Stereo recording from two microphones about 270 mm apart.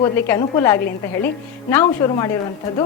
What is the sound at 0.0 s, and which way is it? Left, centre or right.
A woman's voice, centre.